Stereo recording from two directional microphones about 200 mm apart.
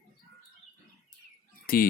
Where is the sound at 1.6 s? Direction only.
45° left (ahead or behind).